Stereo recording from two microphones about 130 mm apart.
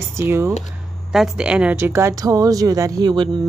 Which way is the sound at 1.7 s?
20° right (ahead or behind).